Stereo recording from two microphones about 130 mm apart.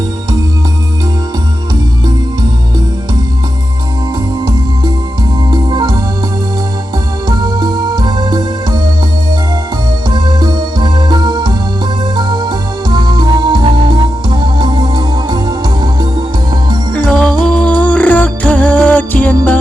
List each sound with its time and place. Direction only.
5.5 s organ: 35° right (ahead or behind)
7.3 s music: 35° right (ahead or behind)
10.1 s music: 35° right (ahead or behind)
16.9 s music: 5° left (ahead or behind)